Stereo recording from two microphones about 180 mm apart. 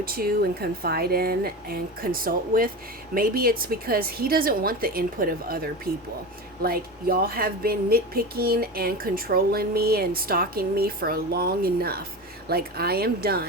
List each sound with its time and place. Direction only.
0.0 s speech: 55° right (ahead or behind)